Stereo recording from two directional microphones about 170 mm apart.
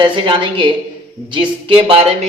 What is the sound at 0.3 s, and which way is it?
A woman's voice, 30° right (ahead or behind).